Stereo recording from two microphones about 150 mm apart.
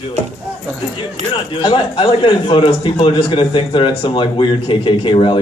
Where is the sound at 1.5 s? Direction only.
30° left (ahead or behind).